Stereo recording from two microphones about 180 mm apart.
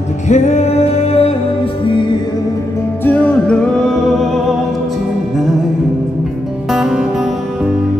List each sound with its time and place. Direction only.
0.3 s music: 40° left (ahead or behind)
3.1 s music: 10° left (ahead or behind)
6.7 s music: centre (ahead or behind)